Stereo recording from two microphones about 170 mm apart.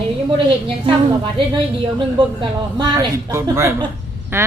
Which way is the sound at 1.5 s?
30° right (ahead or behind).